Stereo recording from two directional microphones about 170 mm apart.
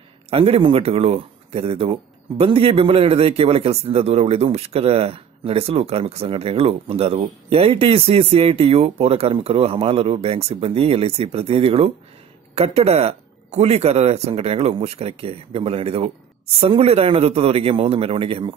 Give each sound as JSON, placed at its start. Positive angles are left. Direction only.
{"t": 0.3, "sound": "speech", "side_deg": -35}